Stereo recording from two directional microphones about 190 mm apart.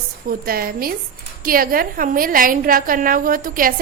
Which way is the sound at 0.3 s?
50° right (ahead or behind).